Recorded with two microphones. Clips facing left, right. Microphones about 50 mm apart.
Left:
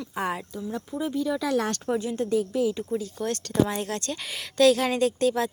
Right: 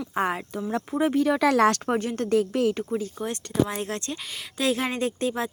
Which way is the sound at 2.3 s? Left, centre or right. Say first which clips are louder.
Right 3 dB; right.